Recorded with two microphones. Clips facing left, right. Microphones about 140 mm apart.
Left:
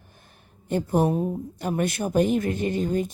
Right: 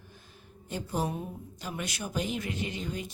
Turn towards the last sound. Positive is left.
turn(degrees=50)  # may be behind; listen again after turning